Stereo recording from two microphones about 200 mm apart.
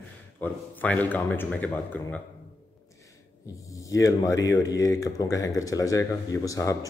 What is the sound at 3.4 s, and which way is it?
Speech, 15° left (ahead or behind).